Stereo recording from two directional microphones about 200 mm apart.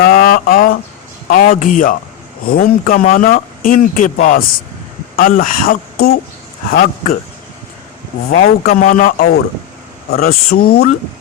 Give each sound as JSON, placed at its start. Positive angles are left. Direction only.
{"t": 0.0, "sound": "a sound", "side_deg": 45}
{"t": 1.3, "sound": "speech", "side_deg": 45}
{"t": 8.3, "sound": "speech", "side_deg": 45}